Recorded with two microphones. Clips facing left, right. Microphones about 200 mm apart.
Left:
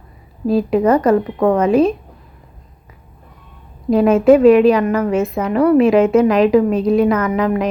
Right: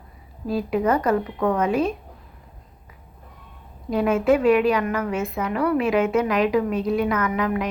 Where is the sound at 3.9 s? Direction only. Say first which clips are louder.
Left 9 dB; 35° left (ahead or behind).